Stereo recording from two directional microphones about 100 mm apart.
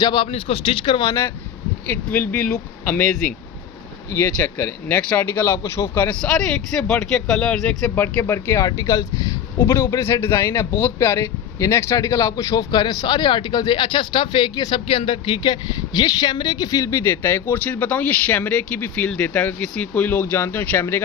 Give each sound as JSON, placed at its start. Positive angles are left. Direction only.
{"t": 0.0, "sound": "speech", "side_deg": 45}
{"t": 0.3, "sound": "speech", "side_deg": 70}
{"t": 1.9, "sound": "speech", "side_deg": 15}
{"t": 4.1, "sound": "speech", "side_deg": 30}
{"t": 4.9, "sound": "speech", "side_deg": 15}
{"t": 6.1, "sound": "speech", "side_deg": 5}
{"t": 7.9, "sound": "a man's voice", "side_deg": 20}
{"t": 14.8, "sound": "speech", "side_deg": 60}